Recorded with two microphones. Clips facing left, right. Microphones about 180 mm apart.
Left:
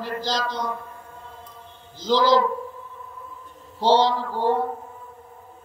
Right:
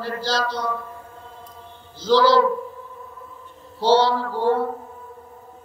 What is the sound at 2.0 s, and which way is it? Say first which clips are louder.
Speech: right 2 dB; 15° left (ahead or behind).